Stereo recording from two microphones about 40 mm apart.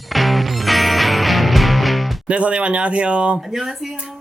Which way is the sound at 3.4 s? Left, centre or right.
Centre.